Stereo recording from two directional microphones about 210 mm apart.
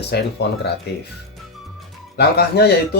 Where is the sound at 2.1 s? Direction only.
50° left (ahead or behind).